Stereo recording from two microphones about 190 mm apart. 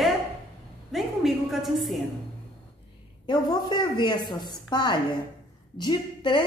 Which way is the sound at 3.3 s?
25° left (ahead or behind).